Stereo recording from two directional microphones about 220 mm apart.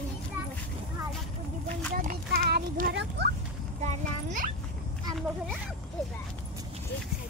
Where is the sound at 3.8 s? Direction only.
35° right (ahead or behind).